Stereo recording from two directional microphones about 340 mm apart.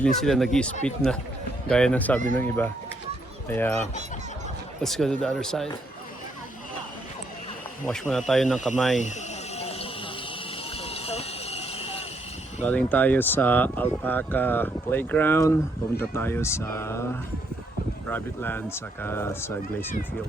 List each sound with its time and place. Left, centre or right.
0.0 s speech: centre
4.8 s speech: centre
7.9 s speech: centre
9.6 s a sound: centre
12.6 s speech: centre
18.1 s speech: centre